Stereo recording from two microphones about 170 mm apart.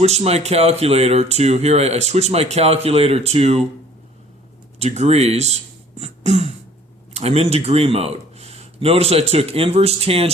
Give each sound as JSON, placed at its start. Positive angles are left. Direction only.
{"t": 0.0, "sound": "speech", "side_deg": -40}
{"t": 4.8, "sound": "speech", "side_deg": -40}